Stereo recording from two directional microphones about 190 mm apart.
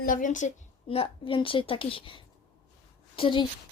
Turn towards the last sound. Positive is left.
turn(degrees=25)  # may be behind; listen again after turning